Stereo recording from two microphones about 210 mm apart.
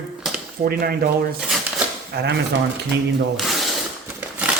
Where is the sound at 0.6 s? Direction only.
45° right (ahead or behind).